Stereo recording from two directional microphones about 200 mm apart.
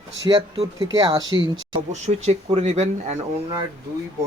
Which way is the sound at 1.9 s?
30° right (ahead or behind).